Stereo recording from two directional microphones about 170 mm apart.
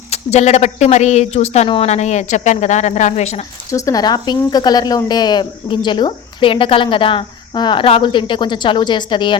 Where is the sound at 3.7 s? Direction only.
20° left (ahead or behind).